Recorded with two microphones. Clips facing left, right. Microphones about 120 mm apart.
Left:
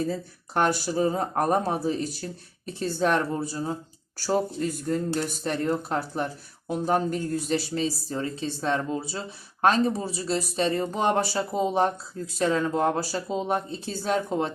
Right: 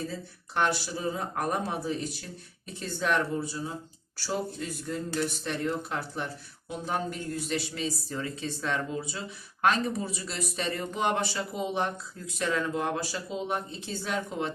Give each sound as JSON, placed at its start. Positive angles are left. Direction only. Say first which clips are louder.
{"t": 0.5, "sound": "a man's voice", "louder": "left 5 dB", "side_deg": 45}